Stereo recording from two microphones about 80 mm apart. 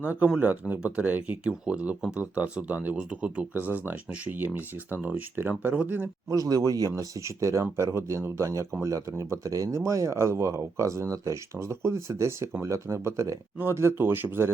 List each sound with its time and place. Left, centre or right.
0.0 s speech: centre
6.3 s speech: right